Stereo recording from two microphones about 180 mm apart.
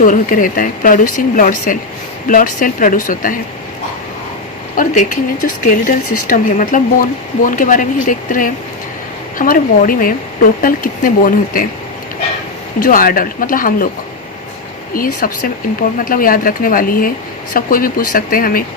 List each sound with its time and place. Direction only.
0.0 s speech: 50° left (ahead or behind)
4.8 s speech: 50° left (ahead or behind)
12.8 s speech: 50° left (ahead or behind)
14.9 s speech: 50° left (ahead or behind)